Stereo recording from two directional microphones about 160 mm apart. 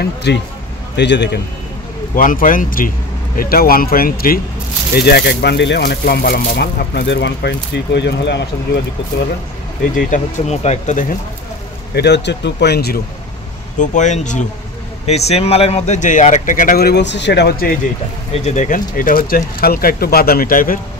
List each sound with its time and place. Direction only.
0.0 s speech: 90° left
2.1 s speech: 60° left (ahead or behind)
4.9 s speech: 90° left
9.9 s speech: 55° left (ahead or behind)
11.9 s speech: 90° left
13.7 s speech: 50° left (ahead or behind); by 17.7 s 70° left (ahead or behind)
18.3 s speech: 45° left (ahead or behind); by 20.8 s 60° left (ahead or behind)